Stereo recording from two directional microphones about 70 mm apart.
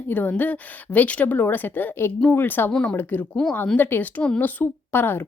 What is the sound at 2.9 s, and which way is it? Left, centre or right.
A woman's voice, left.